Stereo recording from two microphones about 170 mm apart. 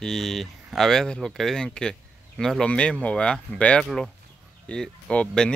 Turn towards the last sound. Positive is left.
turn(degrees=5)  # may be behind; listen again after turning